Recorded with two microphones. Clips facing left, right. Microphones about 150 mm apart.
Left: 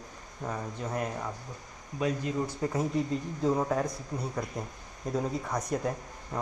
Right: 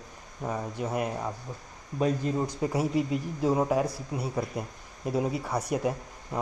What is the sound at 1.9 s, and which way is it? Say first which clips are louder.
Speech: right 3 dB; 35° right (ahead or behind).